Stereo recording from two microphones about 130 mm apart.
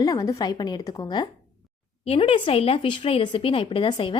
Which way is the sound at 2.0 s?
50° left (ahead or behind).